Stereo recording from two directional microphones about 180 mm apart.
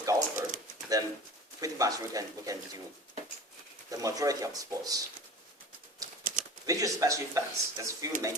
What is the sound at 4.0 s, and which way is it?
Speech, 20° right (ahead or behind).